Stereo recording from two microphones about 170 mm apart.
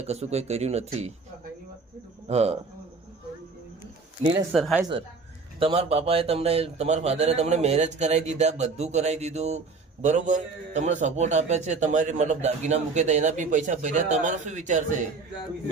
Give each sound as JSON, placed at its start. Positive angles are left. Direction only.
{"t": 0.0, "sound": "a man's voice", "side_deg": -40}
{"t": 2.2, "sound": "a man's voice", "side_deg": -40}
{"t": 4.2, "sound": "a man's voice", "side_deg": -40}
{"t": 4.5, "sound": "speech", "side_deg": 0}
{"t": 4.8, "sound": "a man's voice", "side_deg": -25}